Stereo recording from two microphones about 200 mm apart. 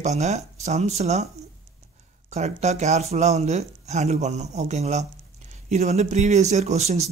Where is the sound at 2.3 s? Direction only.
35° right (ahead or behind).